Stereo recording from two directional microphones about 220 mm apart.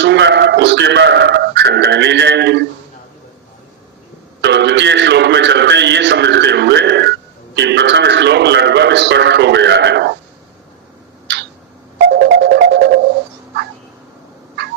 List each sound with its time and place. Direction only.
0.0 s speech: 50° right (ahead or behind)
4.4 s a man's voice: 50° right (ahead or behind)
11.9 s music: 45° right (ahead or behind)